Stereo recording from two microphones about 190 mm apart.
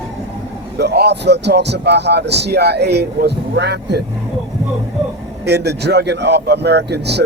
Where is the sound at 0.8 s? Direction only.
60° right (ahead or behind).